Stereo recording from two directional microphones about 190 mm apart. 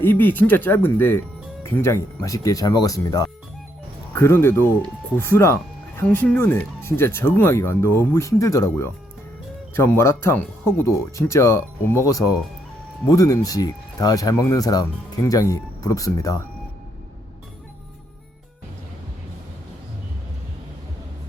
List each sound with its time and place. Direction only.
0.0 s speech: 10° left (ahead or behind)